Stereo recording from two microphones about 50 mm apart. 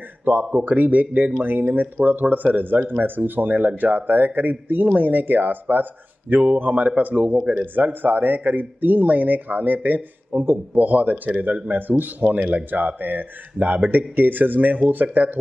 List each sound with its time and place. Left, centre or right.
0.2 s speech: right